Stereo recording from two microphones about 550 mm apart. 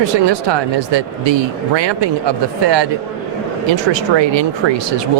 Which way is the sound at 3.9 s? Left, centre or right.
Right.